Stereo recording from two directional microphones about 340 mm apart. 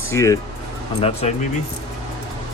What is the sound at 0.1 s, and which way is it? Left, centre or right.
Speech, centre.